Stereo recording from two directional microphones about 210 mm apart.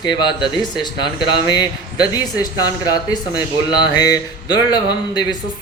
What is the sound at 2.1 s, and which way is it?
Speech, 20° left (ahead or behind).